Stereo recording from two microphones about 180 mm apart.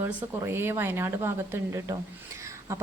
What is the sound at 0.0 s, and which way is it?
Speech, 10° right (ahead or behind).